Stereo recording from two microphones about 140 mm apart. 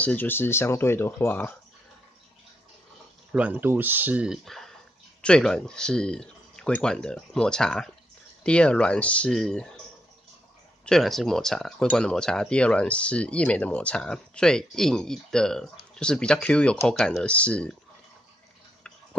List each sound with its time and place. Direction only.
0.0 s speech: 10° left (ahead or behind)
3.3 s speech: 10° right (ahead or behind)
10.9 s speech: centre (ahead or behind)